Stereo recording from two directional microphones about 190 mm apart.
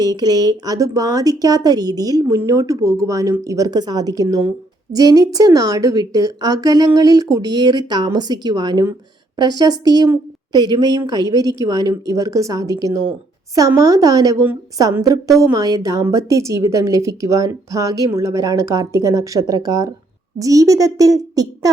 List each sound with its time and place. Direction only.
0.0 s a woman's voice: 20° right (ahead or behind)